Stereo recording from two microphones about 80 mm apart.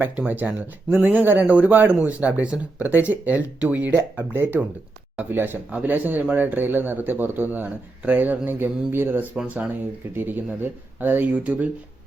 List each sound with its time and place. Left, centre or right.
0.0 s speech: right